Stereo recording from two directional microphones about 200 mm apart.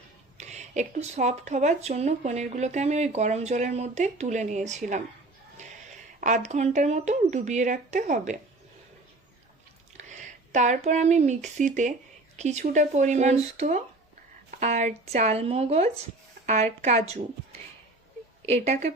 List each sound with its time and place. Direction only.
0.3 s speech: 35° right (ahead or behind)
6.1 s speech: 40° right (ahead or behind)
10.0 s speech: 35° right (ahead or behind)
18.4 s speech: 35° right (ahead or behind)